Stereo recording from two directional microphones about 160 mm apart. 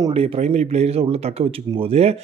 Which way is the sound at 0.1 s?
40° right (ahead or behind).